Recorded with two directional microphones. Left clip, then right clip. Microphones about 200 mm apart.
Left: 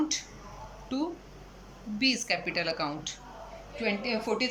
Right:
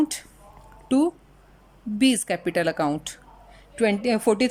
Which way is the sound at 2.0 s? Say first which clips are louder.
Right 5 dB; 45° right (ahead or behind).